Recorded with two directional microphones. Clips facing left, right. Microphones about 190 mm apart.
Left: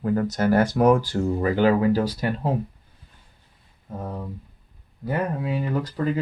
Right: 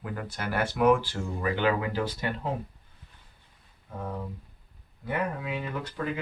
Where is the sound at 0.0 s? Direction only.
40° left (ahead or behind).